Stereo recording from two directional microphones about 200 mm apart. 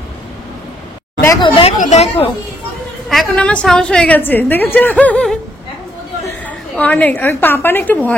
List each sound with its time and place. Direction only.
1.2 s speech: 20° left (ahead or behind)
3.1 s a woman's voice: 5° left (ahead or behind)